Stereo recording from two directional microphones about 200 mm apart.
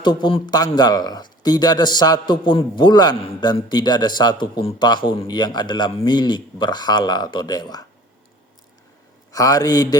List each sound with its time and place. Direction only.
0.0 s a man's voice: 20° left (ahead or behind)
9.3 s a man's voice: 15° left (ahead or behind)